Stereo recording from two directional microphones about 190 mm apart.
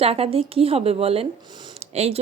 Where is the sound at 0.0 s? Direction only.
30° right (ahead or behind).